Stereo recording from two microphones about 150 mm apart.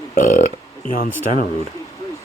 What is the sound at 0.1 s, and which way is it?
Speech, 60° left (ahead or behind).